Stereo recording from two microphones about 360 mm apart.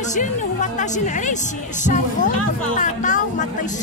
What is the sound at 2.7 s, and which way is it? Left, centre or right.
Speech, left.